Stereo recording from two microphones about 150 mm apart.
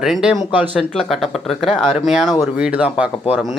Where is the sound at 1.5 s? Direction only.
45° left (ahead or behind).